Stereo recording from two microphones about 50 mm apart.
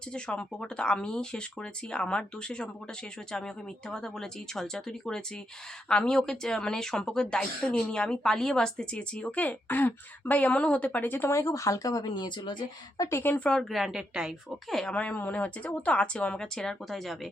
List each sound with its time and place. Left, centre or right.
0.1 s a woman's voice: centre; by 11.3 s left
11.3 s speech: left
13.0 s speech: left
13.4 s speech: centre
13.7 s a woman's voice: centre
14.7 s speech: centre
14.9 s a woman's voice: left
16.9 s speech: centre